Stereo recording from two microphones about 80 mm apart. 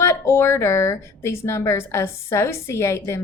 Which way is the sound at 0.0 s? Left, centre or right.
Left.